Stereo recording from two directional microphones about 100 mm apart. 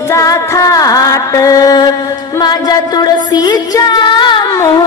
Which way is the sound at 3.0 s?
40° left (ahead or behind).